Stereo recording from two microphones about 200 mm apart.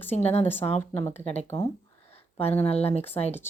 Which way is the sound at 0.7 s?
35° left (ahead or behind).